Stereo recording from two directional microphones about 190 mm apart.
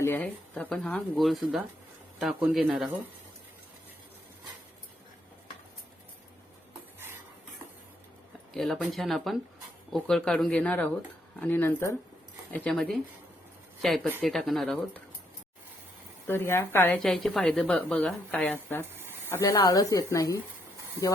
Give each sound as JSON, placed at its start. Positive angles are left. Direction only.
{"t": 0.0, "sound": "a woman's voice", "side_deg": 10}
{"t": 8.5, "sound": "a woman's voice", "side_deg": 0}
{"t": 16.2, "sound": "a woman's voice", "side_deg": 10}
{"t": 17.0, "sound": "a woman's voice", "side_deg": 0}
{"t": 18.9, "sound": "a sound", "side_deg": -10}
{"t": 19.3, "sound": "a woman's voice", "side_deg": 15}